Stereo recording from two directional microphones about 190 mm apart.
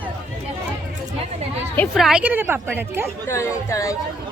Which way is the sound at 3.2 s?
15° left (ahead or behind).